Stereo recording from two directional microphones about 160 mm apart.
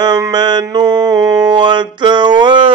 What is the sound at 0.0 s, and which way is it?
Mantra, 25° right (ahead or behind).